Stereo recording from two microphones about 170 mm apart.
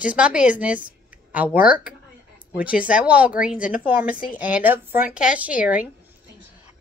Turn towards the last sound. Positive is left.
turn(degrees=-10)  # may be behind; listen again after turning